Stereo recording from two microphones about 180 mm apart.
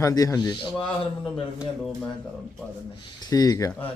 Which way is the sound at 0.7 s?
Centre (ahead or behind).